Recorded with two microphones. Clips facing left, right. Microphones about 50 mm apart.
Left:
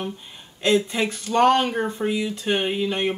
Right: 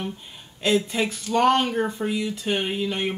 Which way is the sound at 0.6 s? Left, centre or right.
Centre.